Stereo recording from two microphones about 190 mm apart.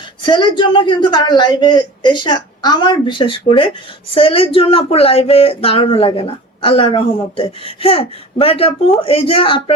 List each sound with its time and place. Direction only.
0.2 s speech: 25° left (ahead or behind)